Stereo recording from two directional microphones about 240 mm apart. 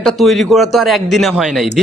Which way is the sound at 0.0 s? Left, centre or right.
Centre.